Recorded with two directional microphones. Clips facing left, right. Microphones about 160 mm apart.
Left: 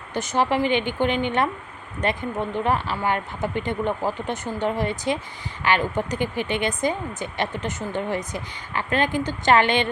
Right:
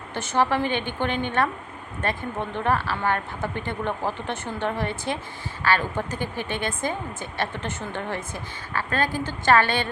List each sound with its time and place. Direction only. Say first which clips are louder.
0.1 s speech: left 1 dB; 15° left (ahead or behind)